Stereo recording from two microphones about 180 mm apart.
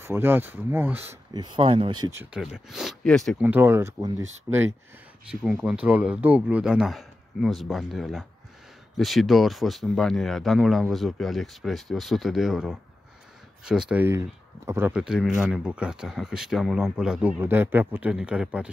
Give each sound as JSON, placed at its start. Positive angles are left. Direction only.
{"t": 0.0, "sound": "speech", "side_deg": -10}
{"t": 1.3, "sound": "speech", "side_deg": -25}
{"t": 2.3, "sound": "speech", "side_deg": -5}
{"t": 3.3, "sound": "speech", "side_deg": -10}